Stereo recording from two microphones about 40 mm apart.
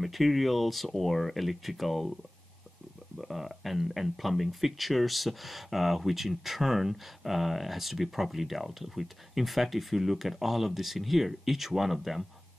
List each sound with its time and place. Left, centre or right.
0.0 s speech: centre
3.2 s speech: centre